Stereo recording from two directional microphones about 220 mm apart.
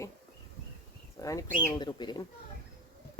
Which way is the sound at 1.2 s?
15° left (ahead or behind).